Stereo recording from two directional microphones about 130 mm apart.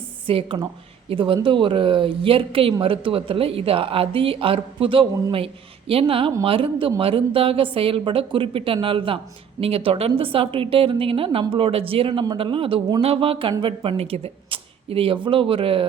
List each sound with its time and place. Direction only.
0.3 s speech: 45° right (ahead or behind)